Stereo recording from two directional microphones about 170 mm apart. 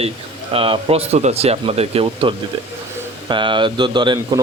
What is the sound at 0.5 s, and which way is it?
Speech, 35° right (ahead or behind).